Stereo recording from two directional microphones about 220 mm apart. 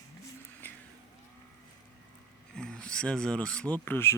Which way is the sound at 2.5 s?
5° left (ahead or behind).